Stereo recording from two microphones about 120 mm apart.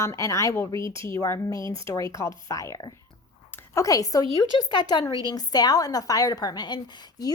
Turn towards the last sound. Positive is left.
turn(degrees=35)  # may be behind; listen again after turning